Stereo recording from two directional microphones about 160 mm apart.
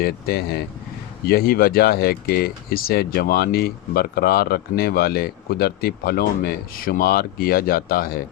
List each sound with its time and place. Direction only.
0.0 s speech: 75° left (ahead or behind)